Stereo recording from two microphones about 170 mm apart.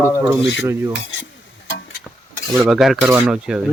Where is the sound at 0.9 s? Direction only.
90° left.